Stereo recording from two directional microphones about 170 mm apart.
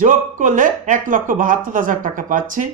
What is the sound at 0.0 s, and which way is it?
Speech, 50° right (ahead or behind).